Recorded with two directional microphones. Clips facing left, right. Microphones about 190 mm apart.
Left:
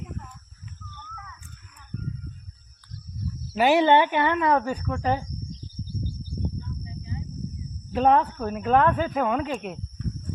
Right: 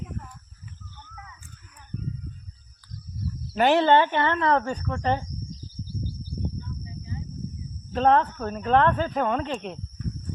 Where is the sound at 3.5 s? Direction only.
5° left (ahead or behind).